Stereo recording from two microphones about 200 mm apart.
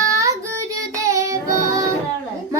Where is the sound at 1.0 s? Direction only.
15° right (ahead or behind).